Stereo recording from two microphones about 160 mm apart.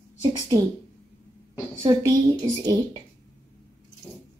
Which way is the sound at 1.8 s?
25° right (ahead or behind).